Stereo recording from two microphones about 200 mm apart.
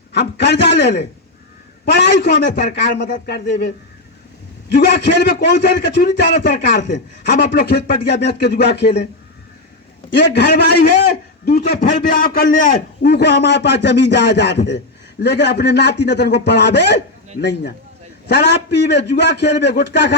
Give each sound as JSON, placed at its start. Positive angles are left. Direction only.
{"t": 0.1, "sound": "a man's voice", "side_deg": 60}
{"t": 4.7, "sound": "a man's voice", "side_deg": 60}
{"t": 10.1, "sound": "a man's voice", "side_deg": 60}
{"t": 11.8, "sound": "a man's voice", "side_deg": 45}
{"t": 13.1, "sound": "a man's voice", "side_deg": 60}